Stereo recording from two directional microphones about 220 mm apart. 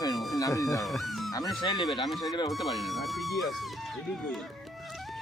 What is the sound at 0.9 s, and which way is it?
Music, centre (ahead or behind).